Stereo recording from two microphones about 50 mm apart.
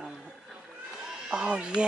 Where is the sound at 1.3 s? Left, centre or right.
Right.